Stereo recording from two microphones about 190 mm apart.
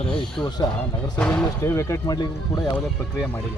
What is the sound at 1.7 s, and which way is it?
Speech, 20° left (ahead or behind).